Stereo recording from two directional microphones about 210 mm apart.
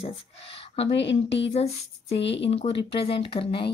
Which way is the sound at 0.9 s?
60° left (ahead or behind).